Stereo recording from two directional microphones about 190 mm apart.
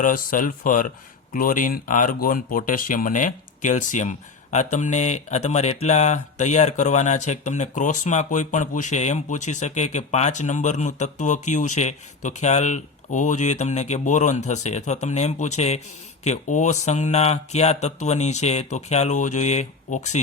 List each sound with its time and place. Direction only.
0.0 s speech: 45° left (ahead or behind)